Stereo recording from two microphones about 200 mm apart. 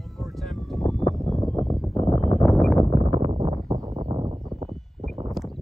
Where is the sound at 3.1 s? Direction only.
30° right (ahead or behind).